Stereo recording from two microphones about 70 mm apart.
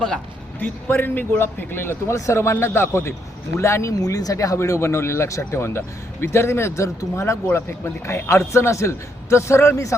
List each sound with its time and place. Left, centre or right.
0.6 s a man's voice: left
4.0 s a man's voice: left